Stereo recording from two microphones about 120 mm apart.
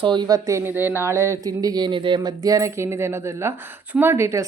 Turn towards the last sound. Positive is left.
turn(degrees=-25)  # may be behind; listen again after turning